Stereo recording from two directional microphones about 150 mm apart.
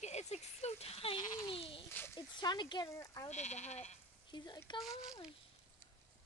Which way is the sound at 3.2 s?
50° left (ahead or behind).